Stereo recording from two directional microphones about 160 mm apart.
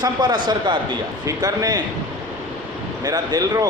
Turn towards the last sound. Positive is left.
turn(degrees=-25)  # may be behind; listen again after turning